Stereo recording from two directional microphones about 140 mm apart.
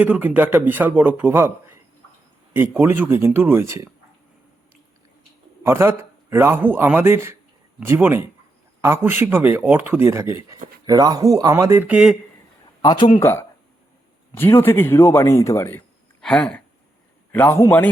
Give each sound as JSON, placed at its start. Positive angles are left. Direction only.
{"t": 0.0, "sound": "a man's voice", "side_deg": -10}
{"t": 5.6, "sound": "a man's voice", "side_deg": -20}
{"t": 11.9, "sound": "speech", "side_deg": -5}
{"t": 12.8, "sound": "speech", "side_deg": 30}
{"t": 13.1, "sound": "speech", "side_deg": 15}
{"t": 16.2, "sound": "speech", "side_deg": 5}